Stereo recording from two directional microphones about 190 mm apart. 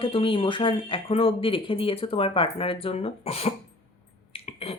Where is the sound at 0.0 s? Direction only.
30° left (ahead or behind).